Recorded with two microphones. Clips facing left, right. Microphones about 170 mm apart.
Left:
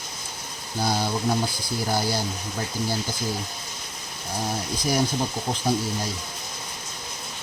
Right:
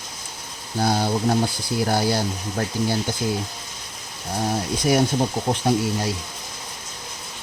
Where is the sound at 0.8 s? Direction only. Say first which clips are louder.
Right 4 dB; 60° right (ahead or behind).